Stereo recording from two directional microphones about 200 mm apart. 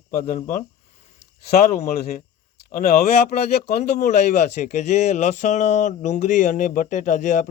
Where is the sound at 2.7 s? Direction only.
50° left (ahead or behind).